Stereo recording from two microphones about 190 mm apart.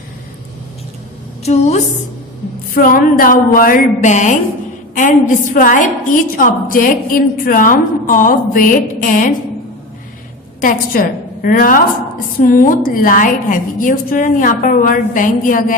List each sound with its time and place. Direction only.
1.5 s a woman's voice: 35° left (ahead or behind)
2.7 s a woman's voice: 45° left (ahead or behind)
10.6 s a woman's voice: 45° left (ahead or behind)